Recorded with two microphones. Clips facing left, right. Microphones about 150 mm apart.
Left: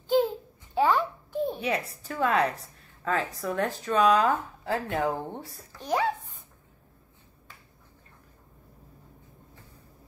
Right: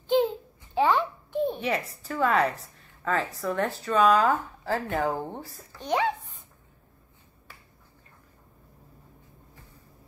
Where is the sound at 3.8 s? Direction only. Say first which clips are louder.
Right 1 dB; 15° left (ahead or behind).